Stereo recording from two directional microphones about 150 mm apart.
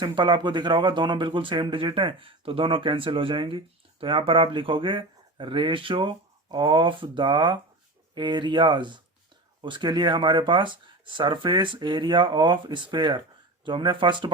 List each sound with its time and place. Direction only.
0.0 s speech: 30° right (ahead or behind)